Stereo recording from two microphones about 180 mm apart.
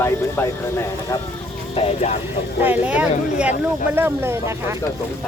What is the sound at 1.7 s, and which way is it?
Speech, 35° left (ahead or behind).